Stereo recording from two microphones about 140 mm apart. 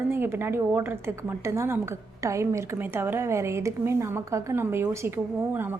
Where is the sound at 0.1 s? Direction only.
15° right (ahead or behind).